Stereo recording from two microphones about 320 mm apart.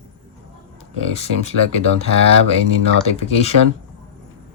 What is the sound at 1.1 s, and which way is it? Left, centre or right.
Speech, centre.